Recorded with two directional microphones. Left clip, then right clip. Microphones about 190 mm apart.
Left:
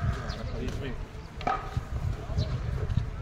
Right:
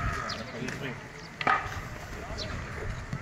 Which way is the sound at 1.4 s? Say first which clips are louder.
Right 4 dB; 70° left (ahead or behind).